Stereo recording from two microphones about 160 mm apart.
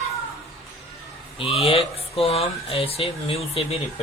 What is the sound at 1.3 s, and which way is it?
Speech, 40° left (ahead or behind).